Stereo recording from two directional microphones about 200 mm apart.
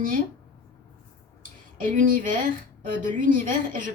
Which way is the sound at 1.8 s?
40° right (ahead or behind).